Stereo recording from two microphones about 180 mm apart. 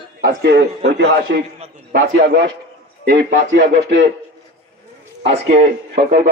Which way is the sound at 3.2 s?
75° right (ahead or behind).